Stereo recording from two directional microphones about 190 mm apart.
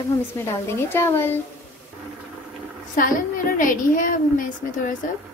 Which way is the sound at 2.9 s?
45° left (ahead or behind).